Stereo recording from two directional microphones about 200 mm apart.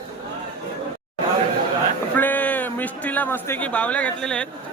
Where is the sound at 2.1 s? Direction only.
10° left (ahead or behind).